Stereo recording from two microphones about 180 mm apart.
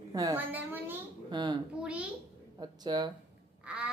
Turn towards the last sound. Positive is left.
turn(degrees=-5)  # may be behind; listen again after turning